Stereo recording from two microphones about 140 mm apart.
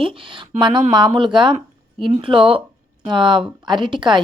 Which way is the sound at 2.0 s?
40° right (ahead or behind).